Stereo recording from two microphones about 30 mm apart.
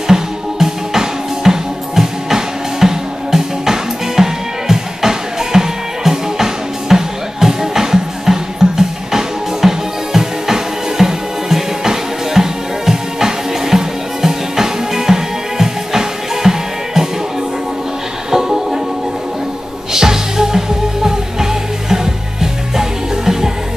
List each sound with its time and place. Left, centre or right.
0.1 s music: centre
18.3 s music: centre
19.9 s music: centre